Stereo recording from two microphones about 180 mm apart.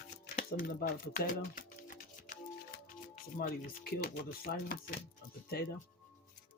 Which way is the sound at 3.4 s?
50° left (ahead or behind).